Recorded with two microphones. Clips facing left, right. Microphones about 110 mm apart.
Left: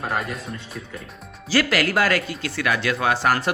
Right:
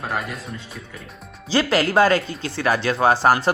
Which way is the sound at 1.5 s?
25° right (ahead or behind).